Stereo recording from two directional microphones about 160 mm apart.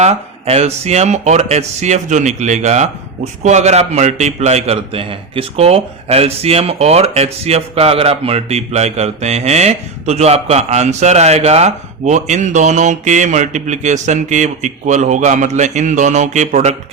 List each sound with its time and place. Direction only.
0.0 s a man's voice: 40° right (ahead or behind)